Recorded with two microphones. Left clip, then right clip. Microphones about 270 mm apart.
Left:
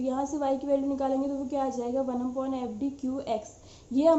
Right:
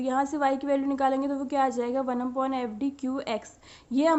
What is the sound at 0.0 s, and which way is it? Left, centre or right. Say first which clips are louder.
A woman's voice: right 4 dB; right.